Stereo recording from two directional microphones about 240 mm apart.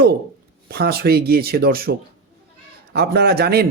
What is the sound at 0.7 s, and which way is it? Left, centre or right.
A man's voice, right.